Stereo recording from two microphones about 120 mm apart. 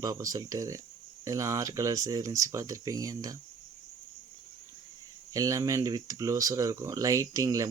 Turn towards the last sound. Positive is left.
turn(degrees=-30)  # may be behind; listen again after turning